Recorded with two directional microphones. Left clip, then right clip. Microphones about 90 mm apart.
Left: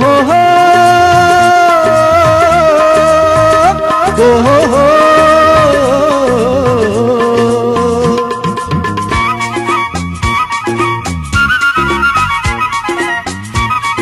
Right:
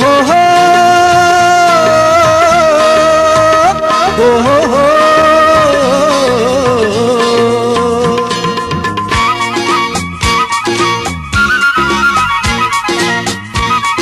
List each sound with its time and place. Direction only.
0.1 s music: 10° right (ahead or behind)
4.5 s music: centre (ahead or behind)
11.3 s music: 30° right (ahead or behind)